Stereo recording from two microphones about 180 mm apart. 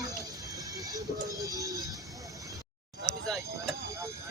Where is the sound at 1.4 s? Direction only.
20° right (ahead or behind).